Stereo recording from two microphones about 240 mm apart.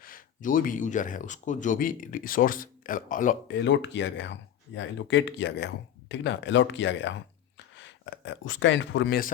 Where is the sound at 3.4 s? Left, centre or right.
Left.